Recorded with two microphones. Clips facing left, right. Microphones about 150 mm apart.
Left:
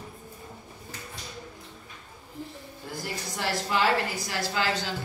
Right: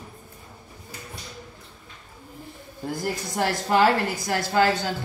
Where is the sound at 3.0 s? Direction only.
50° right (ahead or behind).